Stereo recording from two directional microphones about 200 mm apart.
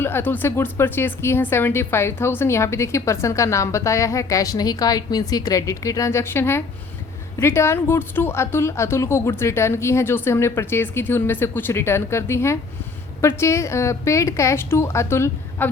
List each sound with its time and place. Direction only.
0.0 s speech: 10° left (ahead or behind)